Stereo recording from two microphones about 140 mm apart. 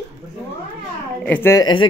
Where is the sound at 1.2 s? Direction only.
15° left (ahead or behind).